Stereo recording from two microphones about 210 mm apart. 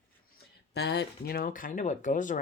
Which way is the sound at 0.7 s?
50° left (ahead or behind).